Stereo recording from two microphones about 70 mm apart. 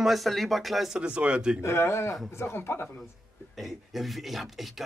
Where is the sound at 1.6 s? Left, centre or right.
Left.